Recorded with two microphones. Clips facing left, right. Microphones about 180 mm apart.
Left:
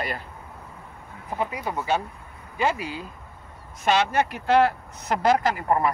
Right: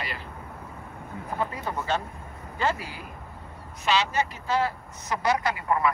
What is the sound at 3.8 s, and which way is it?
Speech, 50° left (ahead or behind).